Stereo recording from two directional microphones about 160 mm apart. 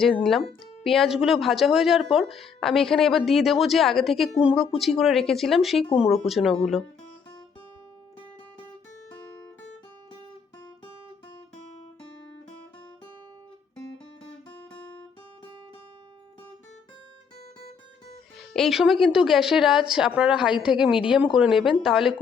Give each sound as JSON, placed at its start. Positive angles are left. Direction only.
{"t": 0.0, "sound": "a woman's voice", "side_deg": 5}
{"t": 5.8, "sound": "speech", "side_deg": 35}
{"t": 6.1, "sound": "a woman's voice", "side_deg": 0}
{"t": 18.5, "sound": "a woman's voice", "side_deg": 0}